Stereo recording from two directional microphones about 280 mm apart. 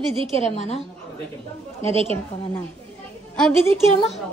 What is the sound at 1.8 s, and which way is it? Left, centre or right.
Speech, centre.